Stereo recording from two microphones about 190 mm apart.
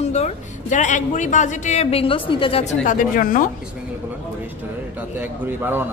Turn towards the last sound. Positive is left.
turn(degrees=-10)  # may be behind; listen again after turning